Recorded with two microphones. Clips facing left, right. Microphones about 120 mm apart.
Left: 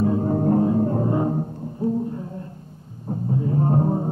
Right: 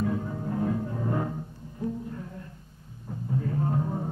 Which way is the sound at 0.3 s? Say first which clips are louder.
Left 12 dB; 45° left (ahead or behind).